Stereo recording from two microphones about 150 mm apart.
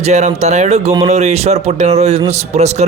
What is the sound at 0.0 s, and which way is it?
A man's voice, 50° right (ahead or behind).